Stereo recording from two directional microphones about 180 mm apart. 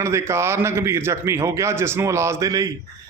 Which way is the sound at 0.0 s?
15° right (ahead or behind).